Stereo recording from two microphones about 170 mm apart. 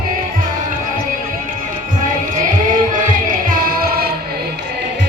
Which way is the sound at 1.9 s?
50° right (ahead or behind).